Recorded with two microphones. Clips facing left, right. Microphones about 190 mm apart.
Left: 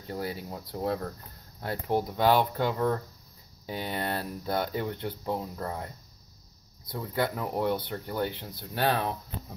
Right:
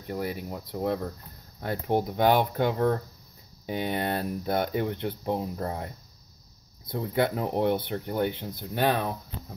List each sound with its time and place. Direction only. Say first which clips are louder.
0.2 s speech: right 2 dB; 20° right (ahead or behind)
1.6 s speech: right 2 dB; 20° right (ahead or behind)
6.9 s speech: right 4 dB; 25° right (ahead or behind)